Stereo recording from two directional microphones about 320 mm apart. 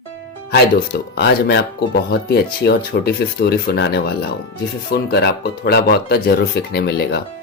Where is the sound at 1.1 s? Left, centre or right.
Left.